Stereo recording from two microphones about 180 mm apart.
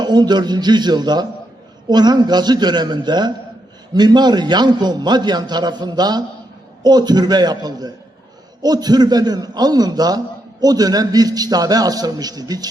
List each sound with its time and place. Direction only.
0.0 s a man's voice: 25° right (ahead or behind)